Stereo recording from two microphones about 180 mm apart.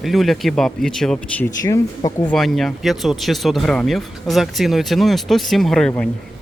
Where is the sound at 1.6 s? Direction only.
20° left (ahead or behind).